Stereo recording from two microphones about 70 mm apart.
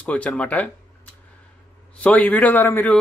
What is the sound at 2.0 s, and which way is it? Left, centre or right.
Speech, left.